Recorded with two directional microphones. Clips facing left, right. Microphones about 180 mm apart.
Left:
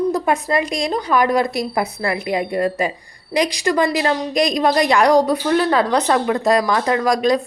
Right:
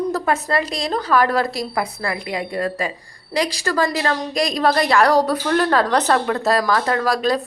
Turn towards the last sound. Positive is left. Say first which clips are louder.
# left 3 dB
turn(degrees=15)  # may be behind; listen again after turning